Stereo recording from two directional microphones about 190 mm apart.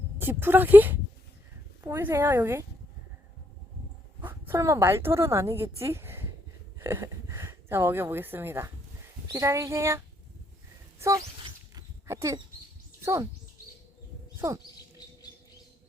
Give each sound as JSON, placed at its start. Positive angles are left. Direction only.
{"t": 0.2, "sound": "a woman's voice", "side_deg": -10}
{"t": 4.2, "sound": "a woman's voice", "side_deg": -10}
{"t": 11.7, "sound": "a sound", "side_deg": -15}
{"t": 13.0, "sound": "speech", "side_deg": -15}